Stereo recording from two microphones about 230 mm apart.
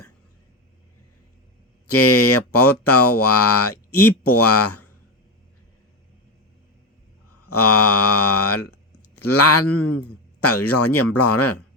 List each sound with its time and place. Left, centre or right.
1.9 s speech: left
7.4 s speech: left